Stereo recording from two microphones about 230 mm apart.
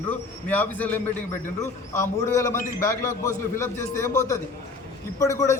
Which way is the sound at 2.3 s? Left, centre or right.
Centre.